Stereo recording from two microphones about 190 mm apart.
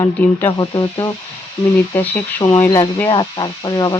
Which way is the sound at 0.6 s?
20° left (ahead or behind).